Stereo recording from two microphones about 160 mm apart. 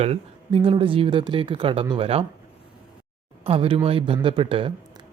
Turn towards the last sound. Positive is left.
turn(degrees=-35)  # may be behind; listen again after turning